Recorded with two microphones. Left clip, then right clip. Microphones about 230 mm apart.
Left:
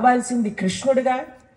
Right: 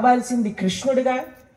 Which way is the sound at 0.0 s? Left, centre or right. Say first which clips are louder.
Even; left.